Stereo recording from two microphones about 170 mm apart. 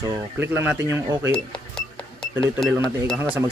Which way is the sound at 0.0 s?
15° right (ahead or behind).